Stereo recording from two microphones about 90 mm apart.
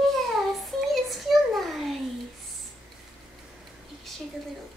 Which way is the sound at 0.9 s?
Centre (ahead or behind).